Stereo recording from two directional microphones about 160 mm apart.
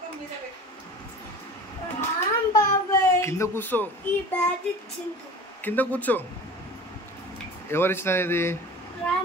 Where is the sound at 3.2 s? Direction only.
15° left (ahead or behind).